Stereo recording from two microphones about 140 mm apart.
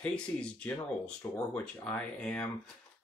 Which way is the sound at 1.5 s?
10° left (ahead or behind).